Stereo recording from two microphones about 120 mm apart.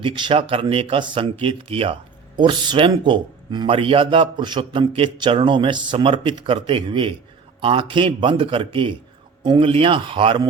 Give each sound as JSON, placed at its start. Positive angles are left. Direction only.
{"t": 0.0, "sound": "speech", "side_deg": -45}